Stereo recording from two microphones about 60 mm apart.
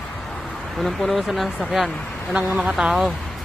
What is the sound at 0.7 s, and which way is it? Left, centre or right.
Speech, centre.